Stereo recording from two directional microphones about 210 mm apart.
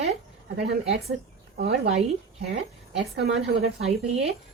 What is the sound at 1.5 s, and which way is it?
Speech, 50° right (ahead or behind).